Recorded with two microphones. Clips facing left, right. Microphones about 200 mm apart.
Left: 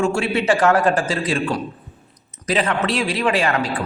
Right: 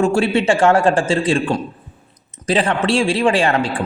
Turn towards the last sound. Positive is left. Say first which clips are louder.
# right 3 dB
turn(degrees=-30)  # may be behind; listen again after turning